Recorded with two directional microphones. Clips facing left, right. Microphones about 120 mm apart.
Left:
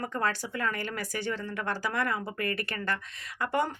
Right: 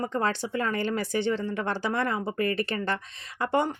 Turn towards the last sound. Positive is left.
turn(degrees=-25)  # may be behind; listen again after turning